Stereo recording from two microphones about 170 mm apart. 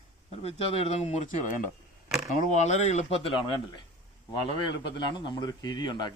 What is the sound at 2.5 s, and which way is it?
Speech, 40° left (ahead or behind).